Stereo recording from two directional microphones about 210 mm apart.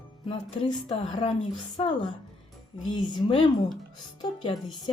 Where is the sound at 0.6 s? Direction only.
25° left (ahead or behind).